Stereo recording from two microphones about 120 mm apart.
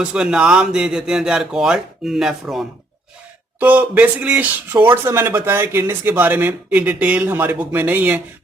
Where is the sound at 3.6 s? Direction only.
15° right (ahead or behind).